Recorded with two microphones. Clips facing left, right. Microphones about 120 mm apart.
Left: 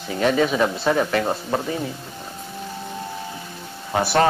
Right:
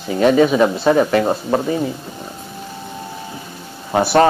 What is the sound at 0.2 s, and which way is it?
Speech, 30° right (ahead or behind).